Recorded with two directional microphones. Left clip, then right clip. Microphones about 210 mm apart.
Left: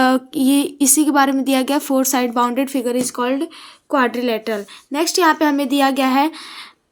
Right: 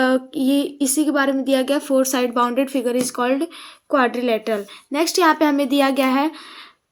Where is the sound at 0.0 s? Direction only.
35° left (ahead or behind).